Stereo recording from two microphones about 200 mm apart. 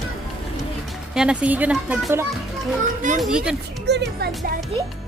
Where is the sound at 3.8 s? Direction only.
60° right (ahead or behind).